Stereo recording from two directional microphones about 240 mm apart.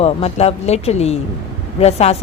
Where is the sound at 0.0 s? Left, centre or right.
Left.